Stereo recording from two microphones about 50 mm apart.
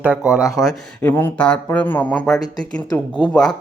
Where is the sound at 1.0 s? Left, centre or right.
Left.